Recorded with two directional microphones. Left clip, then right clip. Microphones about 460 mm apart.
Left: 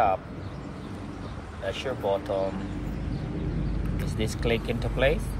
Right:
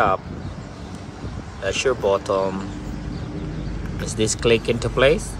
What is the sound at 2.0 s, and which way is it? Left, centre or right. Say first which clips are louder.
Speech: right 4 dB; right.